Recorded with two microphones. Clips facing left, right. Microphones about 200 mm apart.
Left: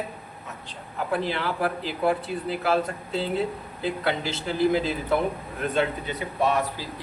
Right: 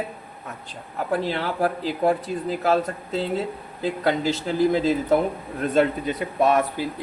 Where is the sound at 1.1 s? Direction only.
40° right (ahead or behind).